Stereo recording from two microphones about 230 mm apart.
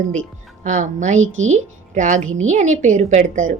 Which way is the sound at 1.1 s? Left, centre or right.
Right.